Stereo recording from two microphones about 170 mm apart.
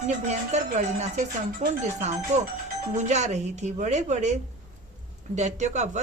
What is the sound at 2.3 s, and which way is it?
Speech, 45° right (ahead or behind).